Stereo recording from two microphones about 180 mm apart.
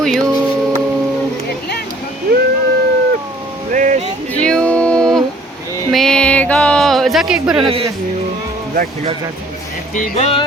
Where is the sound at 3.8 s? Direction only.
45° right (ahead or behind).